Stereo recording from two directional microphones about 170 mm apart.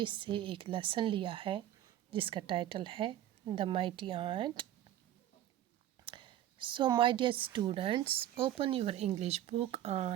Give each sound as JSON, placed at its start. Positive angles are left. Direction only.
{"t": 0.0, "sound": "a woman's voice", "side_deg": -30}
{"t": 6.1, "sound": "a woman's voice", "side_deg": -30}